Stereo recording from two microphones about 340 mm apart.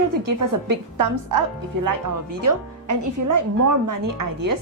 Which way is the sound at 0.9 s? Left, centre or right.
Right.